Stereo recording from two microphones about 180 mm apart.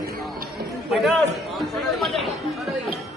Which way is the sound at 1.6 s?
Centre (ahead or behind).